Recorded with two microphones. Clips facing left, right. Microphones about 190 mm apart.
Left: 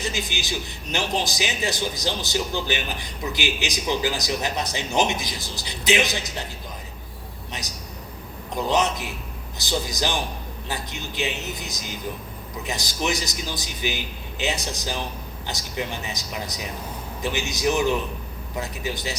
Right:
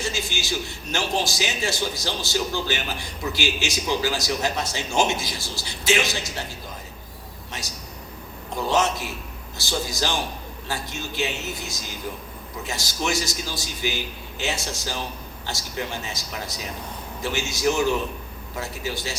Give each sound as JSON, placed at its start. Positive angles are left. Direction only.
{"t": 0.0, "sound": "a man's voice", "side_deg": 20}
{"t": 7.5, "sound": "a sound", "side_deg": 20}
{"t": 8.5, "sound": "a man's voice", "side_deg": 20}